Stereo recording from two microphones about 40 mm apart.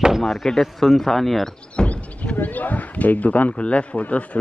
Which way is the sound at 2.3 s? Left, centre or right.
Left.